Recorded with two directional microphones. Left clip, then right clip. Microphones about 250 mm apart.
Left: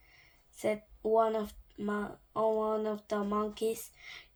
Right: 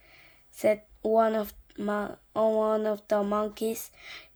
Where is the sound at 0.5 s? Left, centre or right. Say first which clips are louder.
Right 8 dB; right.